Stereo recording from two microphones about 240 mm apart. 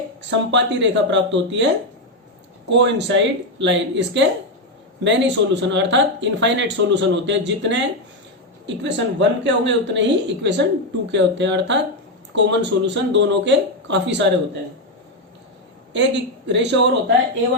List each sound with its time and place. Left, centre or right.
0.3 s speech: right
15.9 s a man's voice: right